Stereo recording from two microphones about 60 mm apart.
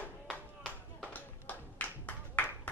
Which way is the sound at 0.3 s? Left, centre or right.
Centre.